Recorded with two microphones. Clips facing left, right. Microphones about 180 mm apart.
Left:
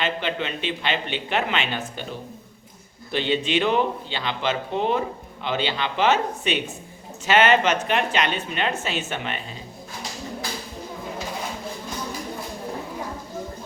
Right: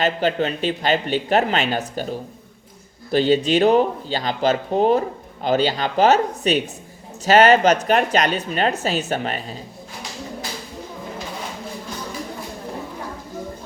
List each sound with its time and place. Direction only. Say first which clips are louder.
0.0 s speech: right 6 dB; 40° right (ahead or behind)